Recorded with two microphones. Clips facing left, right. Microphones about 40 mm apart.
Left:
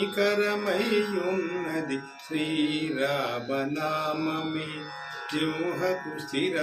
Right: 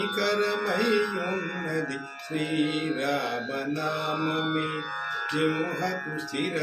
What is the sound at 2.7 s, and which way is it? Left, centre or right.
Music, right.